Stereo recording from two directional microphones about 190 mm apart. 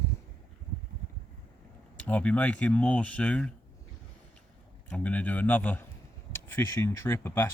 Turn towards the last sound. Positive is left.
turn(degrees=10)  # may be behind; listen again after turning